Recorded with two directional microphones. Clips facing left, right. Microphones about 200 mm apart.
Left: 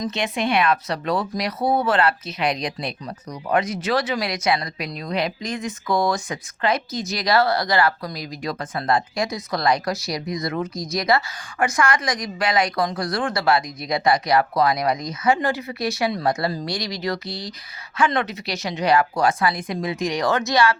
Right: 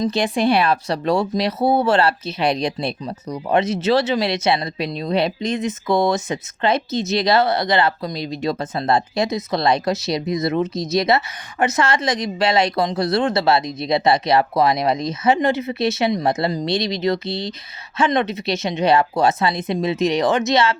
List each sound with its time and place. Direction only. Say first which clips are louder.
0.0 s speech: right 6 dB; 35° right (ahead or behind)